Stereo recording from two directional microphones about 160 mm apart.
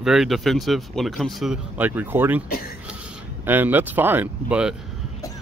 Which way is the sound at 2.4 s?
70° left (ahead or behind).